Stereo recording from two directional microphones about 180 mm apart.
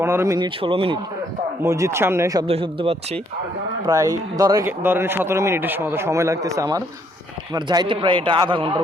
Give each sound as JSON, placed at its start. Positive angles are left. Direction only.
{"t": 0.0, "sound": "a man's voice", "side_deg": -15}
{"t": 1.6, "sound": "speech", "side_deg": -15}
{"t": 2.5, "sound": "speech", "side_deg": -30}
{"t": 3.8, "sound": "a man's voice", "side_deg": -20}